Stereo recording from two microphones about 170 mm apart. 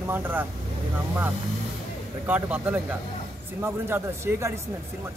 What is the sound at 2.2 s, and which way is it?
Speech, 10° right (ahead or behind).